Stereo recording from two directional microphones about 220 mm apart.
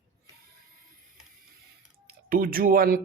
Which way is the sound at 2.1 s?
40° right (ahead or behind).